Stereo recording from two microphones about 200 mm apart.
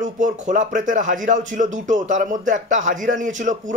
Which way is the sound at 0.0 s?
40° right (ahead or behind).